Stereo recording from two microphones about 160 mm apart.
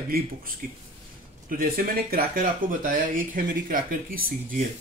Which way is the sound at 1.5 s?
70° right (ahead or behind).